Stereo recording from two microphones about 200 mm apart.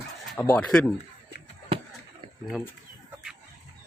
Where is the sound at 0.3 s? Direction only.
10° left (ahead or behind).